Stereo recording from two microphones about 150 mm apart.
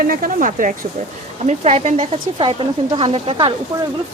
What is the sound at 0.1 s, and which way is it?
Speech, 65° right (ahead or behind).